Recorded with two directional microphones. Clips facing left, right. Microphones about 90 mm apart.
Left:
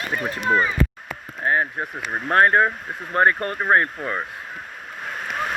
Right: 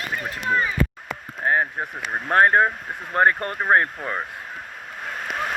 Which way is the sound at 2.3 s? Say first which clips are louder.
Even; 25° right (ahead or behind).